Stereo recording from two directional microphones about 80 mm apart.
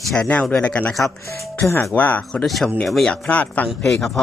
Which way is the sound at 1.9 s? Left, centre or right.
Centre.